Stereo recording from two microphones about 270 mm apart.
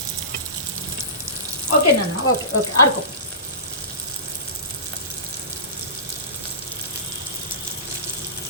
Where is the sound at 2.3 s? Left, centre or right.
Left.